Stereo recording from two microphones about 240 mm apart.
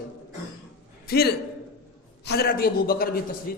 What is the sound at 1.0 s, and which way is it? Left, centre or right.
A man's voice, left.